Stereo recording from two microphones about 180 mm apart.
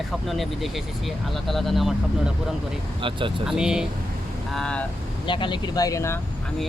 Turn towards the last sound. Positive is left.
turn(degrees=15)  # may be behind; listen again after turning